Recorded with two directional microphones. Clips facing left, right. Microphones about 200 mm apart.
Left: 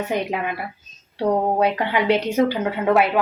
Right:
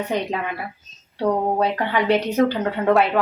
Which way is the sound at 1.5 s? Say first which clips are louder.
Left 1 dB; 10° left (ahead or behind).